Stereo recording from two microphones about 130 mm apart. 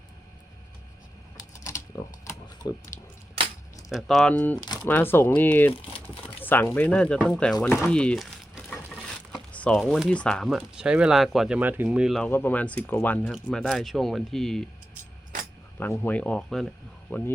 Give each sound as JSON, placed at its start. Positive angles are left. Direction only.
{"t": 1.5, "sound": "typing", "side_deg": 25}
{"t": 2.2, "sound": "a sound", "side_deg": 25}
{"t": 3.4, "sound": "keys jangling", "side_deg": -45}
{"t": 3.8, "sound": "speech", "side_deg": 0}
{"t": 12.2, "sound": "speech", "side_deg": 15}
{"t": 15.8, "sound": "speech", "side_deg": 15}
{"t": 17.1, "sound": "speech", "side_deg": 15}